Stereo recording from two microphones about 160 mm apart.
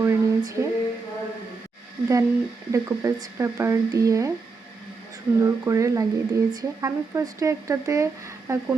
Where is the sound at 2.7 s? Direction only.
20° right (ahead or behind).